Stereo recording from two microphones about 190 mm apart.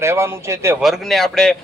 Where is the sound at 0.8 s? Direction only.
Centre (ahead or behind).